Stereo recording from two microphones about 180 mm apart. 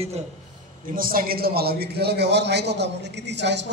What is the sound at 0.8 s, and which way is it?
A man's voice, 50° right (ahead or behind).